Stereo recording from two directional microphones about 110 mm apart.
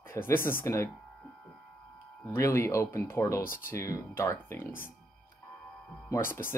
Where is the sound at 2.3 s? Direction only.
25° left (ahead or behind).